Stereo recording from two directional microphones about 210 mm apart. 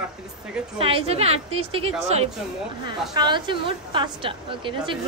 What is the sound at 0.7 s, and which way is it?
A woman's voice, 25° right (ahead or behind).